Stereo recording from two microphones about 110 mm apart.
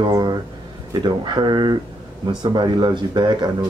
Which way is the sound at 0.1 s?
40° right (ahead or behind).